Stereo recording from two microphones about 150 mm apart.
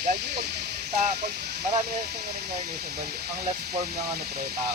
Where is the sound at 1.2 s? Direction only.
90° right.